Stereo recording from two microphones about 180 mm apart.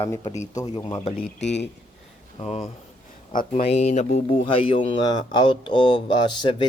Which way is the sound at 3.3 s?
50° left (ahead or behind).